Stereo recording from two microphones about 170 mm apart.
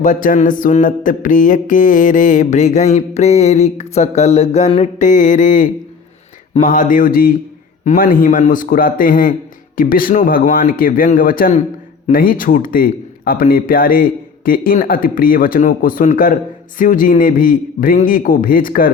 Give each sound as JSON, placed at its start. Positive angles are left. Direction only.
{"t": 0.0, "sound": "mantra", "side_deg": 50}
{"t": 7.9, "sound": "a man's voice", "side_deg": 55}